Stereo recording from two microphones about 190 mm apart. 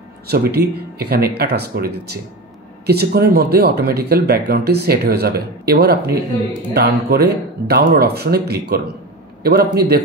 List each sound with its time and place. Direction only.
0.3 s speech: 55° right (ahead or behind)